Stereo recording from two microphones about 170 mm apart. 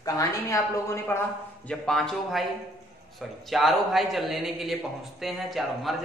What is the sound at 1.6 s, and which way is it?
A man's voice, 5° left (ahead or behind).